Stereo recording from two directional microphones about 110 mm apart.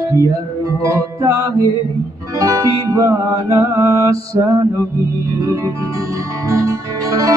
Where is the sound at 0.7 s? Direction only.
30° right (ahead or behind).